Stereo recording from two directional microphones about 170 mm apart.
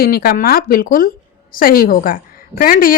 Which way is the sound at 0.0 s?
60° left (ahead or behind).